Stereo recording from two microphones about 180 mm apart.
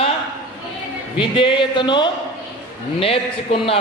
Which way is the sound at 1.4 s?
30° left (ahead or behind).